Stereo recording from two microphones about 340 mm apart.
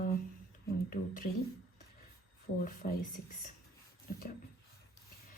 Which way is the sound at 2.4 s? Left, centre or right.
Left.